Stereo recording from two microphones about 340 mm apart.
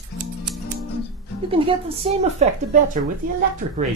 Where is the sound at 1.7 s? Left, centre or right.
Centre.